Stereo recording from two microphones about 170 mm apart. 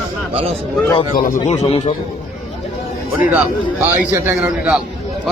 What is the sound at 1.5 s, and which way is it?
Speech, 40° left (ahead or behind).